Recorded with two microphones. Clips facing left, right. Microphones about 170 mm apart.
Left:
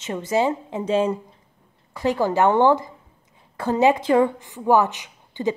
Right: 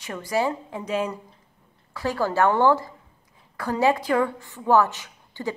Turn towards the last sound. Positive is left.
turn(degrees=20)  # may be behind; listen again after turning